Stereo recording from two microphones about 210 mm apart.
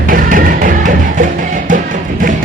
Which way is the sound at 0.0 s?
40° right (ahead or behind).